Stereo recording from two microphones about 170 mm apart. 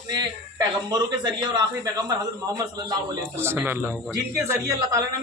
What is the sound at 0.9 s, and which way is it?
A man's voice, 25° right (ahead or behind).